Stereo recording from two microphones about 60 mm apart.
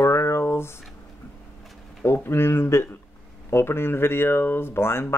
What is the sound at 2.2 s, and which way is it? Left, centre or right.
Speech, left.